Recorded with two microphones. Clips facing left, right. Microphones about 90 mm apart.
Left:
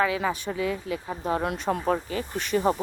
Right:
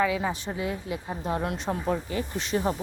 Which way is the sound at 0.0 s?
60° left (ahead or behind).